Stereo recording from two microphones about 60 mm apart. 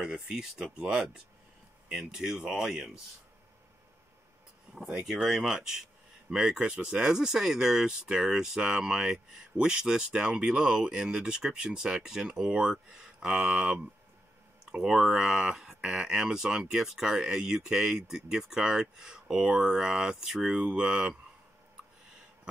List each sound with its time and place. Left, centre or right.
0.0 s speech: centre
5.0 s speech: centre